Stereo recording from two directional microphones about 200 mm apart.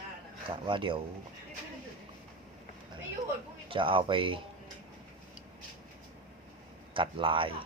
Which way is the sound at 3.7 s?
25° right (ahead or behind).